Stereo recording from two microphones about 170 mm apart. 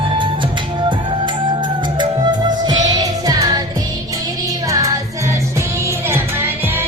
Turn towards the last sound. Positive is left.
turn(degrees=-10)  # may be behind; listen again after turning